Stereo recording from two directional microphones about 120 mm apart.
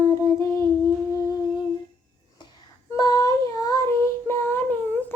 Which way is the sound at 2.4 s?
40° left (ahead or behind).